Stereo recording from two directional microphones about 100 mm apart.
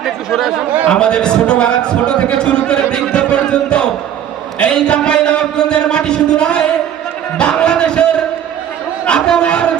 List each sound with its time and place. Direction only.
0.0 s chatter: centre (ahead or behind)
0.9 s a man's voice: 10° left (ahead or behind)
7.3 s a sound: 10° left (ahead or behind)
9.0 s a man's voice: 10° left (ahead or behind)